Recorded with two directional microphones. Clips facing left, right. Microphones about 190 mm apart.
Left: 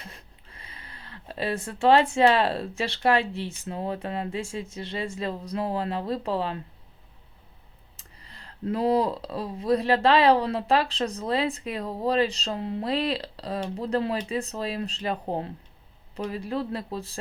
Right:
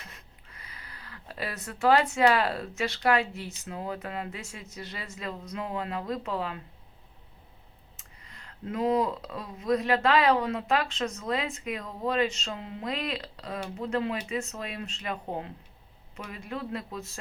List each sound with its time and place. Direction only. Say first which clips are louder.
0.0 s speech: left 4 dB; 30° left (ahead or behind)
7.9 s speech: left 3 dB; 35° left (ahead or behind)